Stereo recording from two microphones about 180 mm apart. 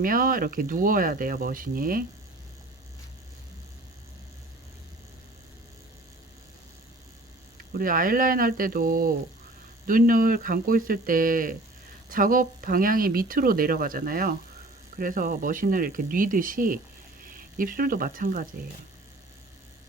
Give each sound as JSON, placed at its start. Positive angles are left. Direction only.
{"t": 0.0, "sound": "speech", "side_deg": -50}
{"t": 7.7, "sound": "speech", "side_deg": -50}